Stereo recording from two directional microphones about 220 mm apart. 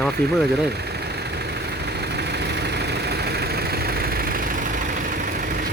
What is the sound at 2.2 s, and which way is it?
Vehicle, 50° right (ahead or behind).